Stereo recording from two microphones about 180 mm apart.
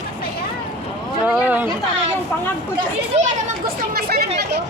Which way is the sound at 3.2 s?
55° right (ahead or behind).